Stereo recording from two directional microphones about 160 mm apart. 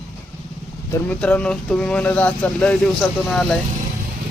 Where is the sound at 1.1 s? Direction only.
10° left (ahead or behind).